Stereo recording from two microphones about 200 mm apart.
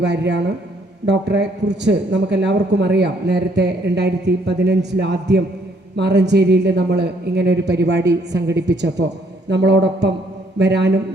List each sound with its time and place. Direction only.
0.0 s a man's voice: 60° right (ahead or behind)